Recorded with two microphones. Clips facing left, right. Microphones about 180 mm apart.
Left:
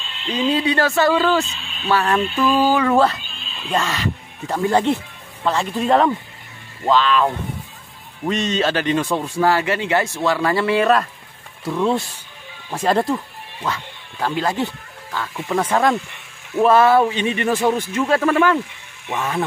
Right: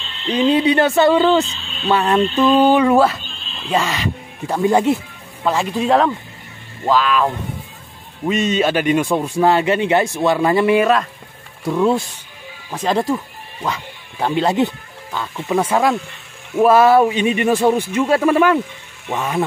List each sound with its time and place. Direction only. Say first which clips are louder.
0.3 s speech: right 5 dB; 20° right (ahead or behind)
1.5 s speech: right 3 dB; 15° left (ahead or behind)
1.9 s speech: right 3 dB; 20° right (ahead or behind)
2.9 s speech: right 2 dB; 10° right (ahead or behind)
3.4 s neigh: right 1 dB; 5° left (ahead or behind)
3.7 s speech: right 2 dB; 15° right (ahead or behind)
12.7 s speech: even; 5° left (ahead or behind)
14.2 s speech: right 5 dB; 20° right (ahead or behind)